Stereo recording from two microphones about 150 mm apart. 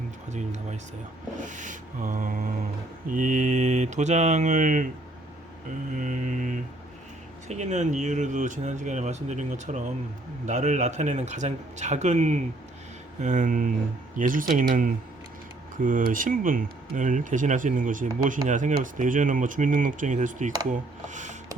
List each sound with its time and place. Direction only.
0.3 s speech: 50° right (ahead or behind)
5.9 s speech: 55° right (ahead or behind)